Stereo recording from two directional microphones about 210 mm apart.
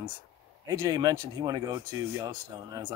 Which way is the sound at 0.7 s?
15° right (ahead or behind).